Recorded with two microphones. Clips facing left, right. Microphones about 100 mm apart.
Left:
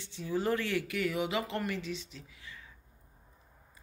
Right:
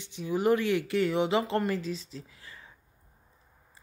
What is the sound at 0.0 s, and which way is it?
Speech, 15° right (ahead or behind).